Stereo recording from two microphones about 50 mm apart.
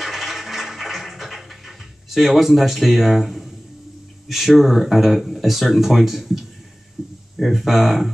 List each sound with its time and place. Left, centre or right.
0.0 s music: centre
4.3 s speech: centre
7.0 s a sound: centre
7.3 s speech: centre